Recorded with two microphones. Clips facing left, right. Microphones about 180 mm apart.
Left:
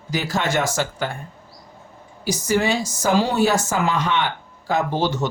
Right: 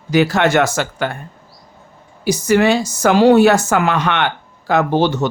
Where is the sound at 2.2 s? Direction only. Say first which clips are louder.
Right 7 dB; 65° right (ahead or behind).